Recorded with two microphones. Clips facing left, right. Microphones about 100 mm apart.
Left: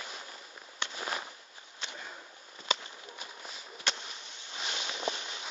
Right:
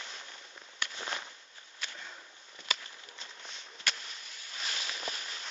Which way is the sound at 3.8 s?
25° left (ahead or behind).